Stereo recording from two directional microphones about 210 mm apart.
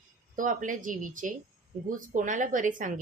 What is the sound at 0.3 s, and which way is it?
A woman's voice, 40° right (ahead or behind).